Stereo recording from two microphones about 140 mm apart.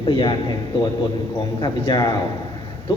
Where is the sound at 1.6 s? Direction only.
30° left (ahead or behind).